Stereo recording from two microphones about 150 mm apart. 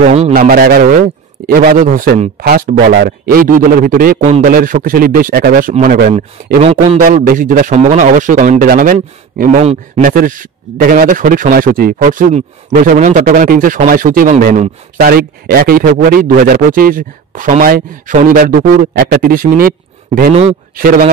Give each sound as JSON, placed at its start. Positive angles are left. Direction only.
{"t": 0.0, "sound": "speech", "side_deg": -50}
{"t": 0.3, "sound": "a man's voice", "side_deg": -80}
{"t": 1.8, "sound": "speech", "side_deg": -65}
{"t": 2.4, "sound": "speech", "side_deg": -75}
{"t": 4.2, "sound": "speech", "side_deg": -45}
{"t": 4.5, "sound": "speech", "side_deg": -65}
{"t": 6.1, "sound": "speech", "side_deg": -45}
{"t": 7.0, "sound": "speech", "side_deg": -60}
{"t": 9.6, "sound": "speech", "side_deg": -50}
{"t": 10.0, "sound": "speech", "side_deg": -65}
{"t": 15.0, "sound": "speech", "side_deg": -85}
{"t": 20.7, "sound": "speech", "side_deg": -70}